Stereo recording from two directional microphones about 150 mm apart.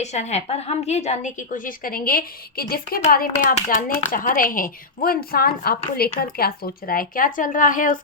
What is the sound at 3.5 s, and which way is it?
Speech, 55° left (ahead or behind).